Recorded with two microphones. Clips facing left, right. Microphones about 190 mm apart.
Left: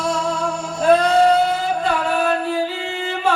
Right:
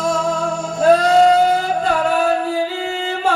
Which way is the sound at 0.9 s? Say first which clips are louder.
Right 1 dB; 45° right (ahead or behind).